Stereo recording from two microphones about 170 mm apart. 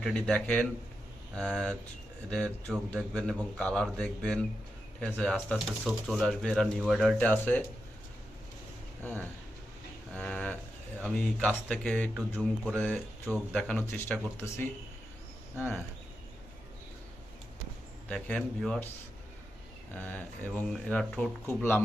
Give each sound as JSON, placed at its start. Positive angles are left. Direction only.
{"t": 0.0, "sound": "speech", "side_deg": 5}
{"t": 10.2, "sound": "speech", "side_deg": 5}
{"t": 18.1, "sound": "speech", "side_deg": 5}
{"t": 19.9, "sound": "speech", "side_deg": 10}